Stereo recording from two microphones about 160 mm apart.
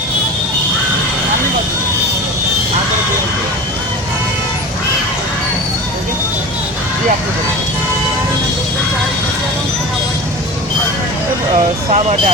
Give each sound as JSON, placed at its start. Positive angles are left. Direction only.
{"t": 11.5, "sound": "speech", "side_deg": -40}